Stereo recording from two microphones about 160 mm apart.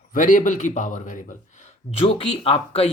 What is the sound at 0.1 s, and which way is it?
Speech, 55° left (ahead or behind).